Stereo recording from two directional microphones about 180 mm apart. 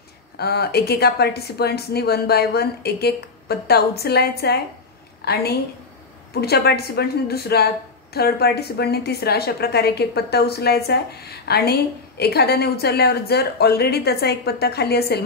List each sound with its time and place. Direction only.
0.4 s a woman's voice: 60° left (ahead or behind)